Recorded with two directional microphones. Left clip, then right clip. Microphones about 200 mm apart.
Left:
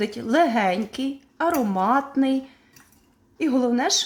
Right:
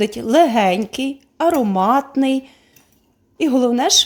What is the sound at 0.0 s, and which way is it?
Speech, 30° right (ahead or behind).